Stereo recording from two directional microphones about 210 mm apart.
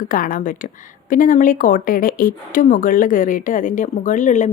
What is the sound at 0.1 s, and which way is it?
Speech, 40° left (ahead or behind).